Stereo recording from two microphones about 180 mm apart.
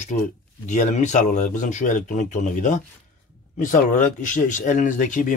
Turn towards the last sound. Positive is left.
turn(degrees=45)  # may be behind; listen again after turning